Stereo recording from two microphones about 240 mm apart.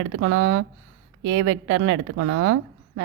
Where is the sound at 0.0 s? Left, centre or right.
Right.